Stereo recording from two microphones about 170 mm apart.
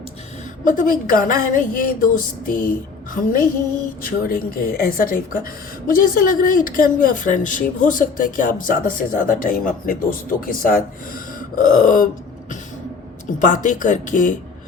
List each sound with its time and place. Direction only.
0.6 s a woman's voice: 50° left (ahead or behind)
4.0 s a woman's voice: 55° left (ahead or behind)
13.4 s a woman's voice: 50° left (ahead or behind)